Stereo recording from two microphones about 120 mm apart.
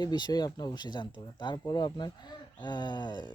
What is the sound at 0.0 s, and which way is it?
Speech, 35° left (ahead or behind).